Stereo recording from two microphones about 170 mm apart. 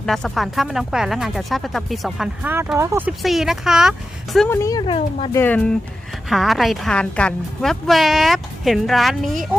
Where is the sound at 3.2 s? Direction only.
Centre (ahead or behind).